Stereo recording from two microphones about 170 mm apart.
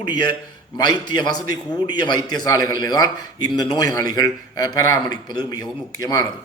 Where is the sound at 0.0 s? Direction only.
25° left (ahead or behind).